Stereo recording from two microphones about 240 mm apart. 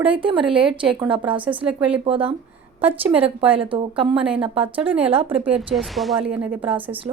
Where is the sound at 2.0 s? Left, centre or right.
Right.